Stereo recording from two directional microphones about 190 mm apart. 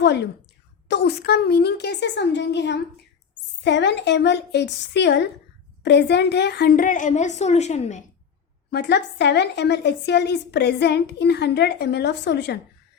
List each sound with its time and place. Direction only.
0.0 s a woman's voice: 60° left (ahead or behind); by 8.0 s 35° left (ahead or behind)
8.7 s a woman's voice: 60° left (ahead or behind)